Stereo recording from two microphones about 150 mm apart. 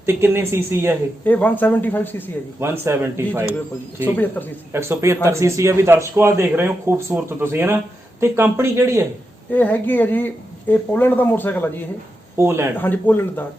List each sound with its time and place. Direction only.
0.0 s a man's voice: 15° right (ahead or behind)
1.2 s speech: 10° left (ahead or behind)
2.6 s a man's voice: 15° right (ahead or behind)
4.0 s speech: 10° left (ahead or behind)
4.7 s a man's voice: 15° right (ahead or behind)
9.5 s speech: 10° left (ahead or behind)
12.4 s a man's voice: 15° right (ahead or behind)
12.7 s speech: 10° left (ahead or behind)